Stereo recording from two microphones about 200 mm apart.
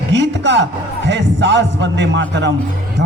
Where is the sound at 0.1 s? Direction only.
60° right (ahead or behind).